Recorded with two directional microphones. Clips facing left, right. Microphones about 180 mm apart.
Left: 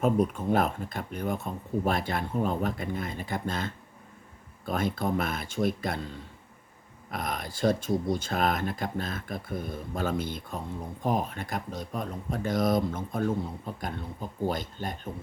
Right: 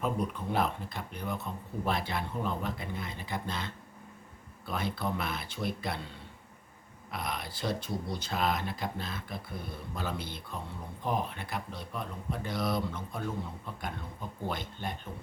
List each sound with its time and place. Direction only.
0.0 s speech: 45° left (ahead or behind)
7.1 s speech: 45° left (ahead or behind)